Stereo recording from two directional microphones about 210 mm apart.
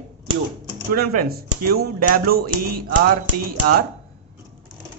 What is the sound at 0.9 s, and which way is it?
A man's voice, 45° right (ahead or behind).